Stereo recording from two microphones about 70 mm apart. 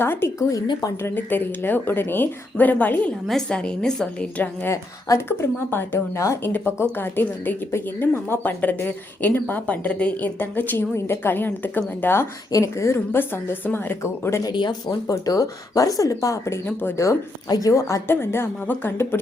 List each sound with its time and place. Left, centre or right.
0.0 s a woman's voice: left
0.3 s speech: left
1.0 s a woman's voice: left
3.2 s a woman's voice: centre
4.7 s a woman's voice: left
12.5 s a woman's voice: left
14.4 s speech: left
14.8 s a woman's voice: left